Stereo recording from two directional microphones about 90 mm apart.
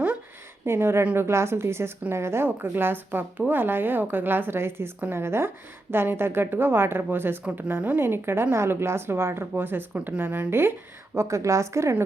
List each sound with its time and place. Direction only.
0.6 s speech: 30° right (ahead or behind)
7.4 s a woman's voice: 10° right (ahead or behind); by 12.0 s 30° right (ahead or behind)